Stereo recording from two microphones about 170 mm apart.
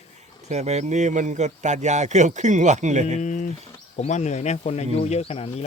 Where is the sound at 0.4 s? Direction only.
40° right (ahead or behind).